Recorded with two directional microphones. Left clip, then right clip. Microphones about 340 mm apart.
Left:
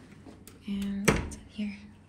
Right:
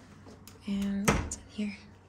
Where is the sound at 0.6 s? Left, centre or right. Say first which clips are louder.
Right 1 dB; centre.